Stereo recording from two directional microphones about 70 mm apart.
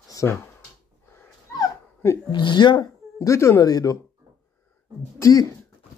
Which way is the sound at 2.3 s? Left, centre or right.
Left.